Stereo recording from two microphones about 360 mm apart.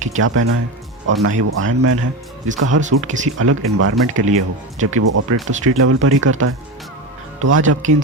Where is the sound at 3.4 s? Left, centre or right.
Right.